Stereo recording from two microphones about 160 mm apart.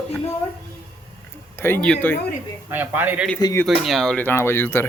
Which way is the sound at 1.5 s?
15° left (ahead or behind).